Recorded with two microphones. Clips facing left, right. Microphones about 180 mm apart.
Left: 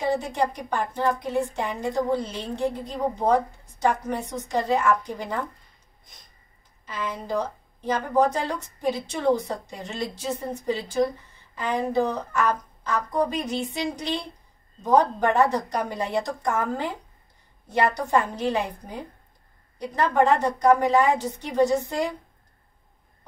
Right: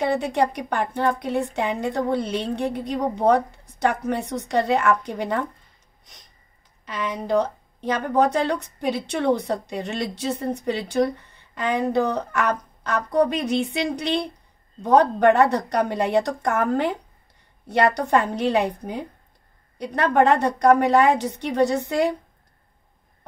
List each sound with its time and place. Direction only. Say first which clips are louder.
0.0 s a woman's voice: right 3 dB; 70° right (ahead or behind)
6.8 s a woman's voice: right 3 dB; 70° right (ahead or behind)